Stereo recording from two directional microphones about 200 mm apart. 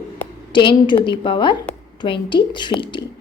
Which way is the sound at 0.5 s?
25° left (ahead or behind).